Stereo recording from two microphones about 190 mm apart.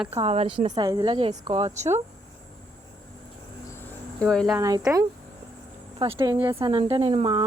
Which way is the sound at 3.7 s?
5° left (ahead or behind).